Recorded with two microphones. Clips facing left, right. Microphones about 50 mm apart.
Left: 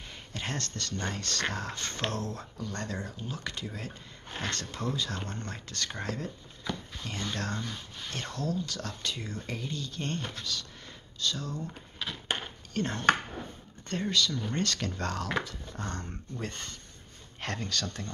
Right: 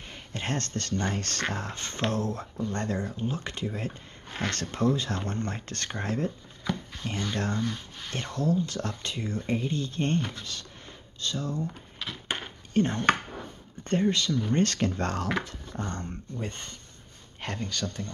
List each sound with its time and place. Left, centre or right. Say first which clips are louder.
0.1 s speech: right 4 dB; right
4.4 s speech: right 6 dB; right
6.7 s a sound: right 4 dB; right
7.3 s speech: right 5 dB; right
12.7 s speech: right 3 dB; centre
14.1 s speech: right 3 dB; right
15.7 s speech: right 4 dB; centre
16.0 s speech: right 3 dB; centre